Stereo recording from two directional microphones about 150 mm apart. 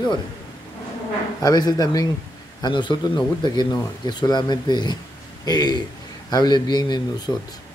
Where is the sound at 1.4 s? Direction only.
25° left (ahead or behind).